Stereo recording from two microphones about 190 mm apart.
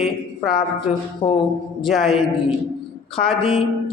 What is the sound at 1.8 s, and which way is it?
Speech, centre (ahead or behind).